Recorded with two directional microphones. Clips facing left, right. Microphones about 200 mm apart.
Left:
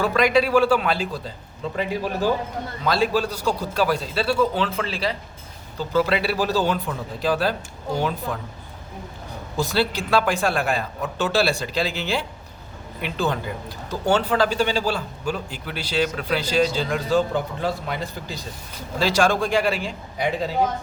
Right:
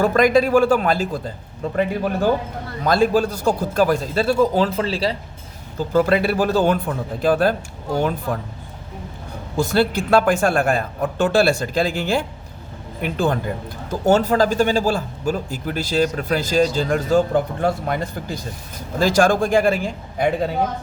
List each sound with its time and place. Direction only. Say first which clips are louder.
0.0 s speech: right 4 dB; 45° right (ahead or behind)
5.7 s speech: right 4 dB; 45° right (ahead or behind)
9.6 s speech: right 4 dB; 50° right (ahead or behind)